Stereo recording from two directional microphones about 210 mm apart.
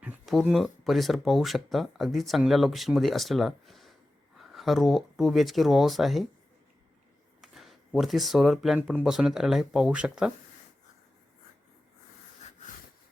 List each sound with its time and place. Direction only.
0.0 s speech: centre (ahead or behind)
7.4 s speech: centre (ahead or behind)